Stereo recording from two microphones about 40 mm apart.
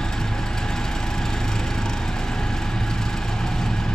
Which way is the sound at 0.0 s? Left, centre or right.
Centre.